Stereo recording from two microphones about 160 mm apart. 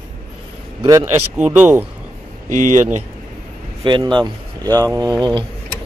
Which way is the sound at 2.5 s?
50° right (ahead or behind).